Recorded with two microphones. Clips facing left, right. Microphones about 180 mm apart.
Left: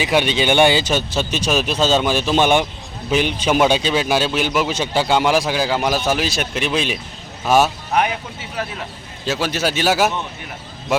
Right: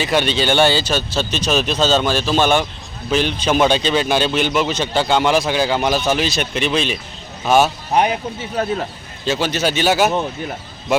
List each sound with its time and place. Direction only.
0.0 s speech: 10° left (ahead or behind)
7.9 s speech: 35° right (ahead or behind)
9.2 s speech: 5° left (ahead or behind)